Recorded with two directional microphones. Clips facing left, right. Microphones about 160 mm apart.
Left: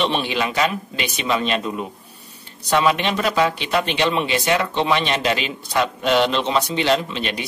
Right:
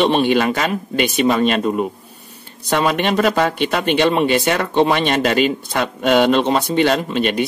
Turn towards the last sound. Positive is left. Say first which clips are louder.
# right 3 dB
turn(degrees=-55)  # may be behind; listen again after turning